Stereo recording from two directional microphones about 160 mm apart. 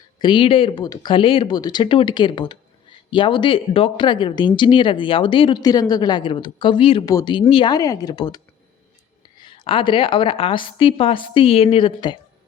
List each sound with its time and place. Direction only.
0.2 s a woman's voice: 30° left (ahead or behind)
7.0 s speech: 20° left (ahead or behind)
9.4 s a woman's voice: 30° left (ahead or behind)